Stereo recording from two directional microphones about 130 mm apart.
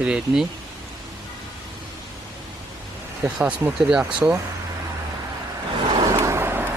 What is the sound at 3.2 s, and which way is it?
Speech, 10° right (ahead or behind).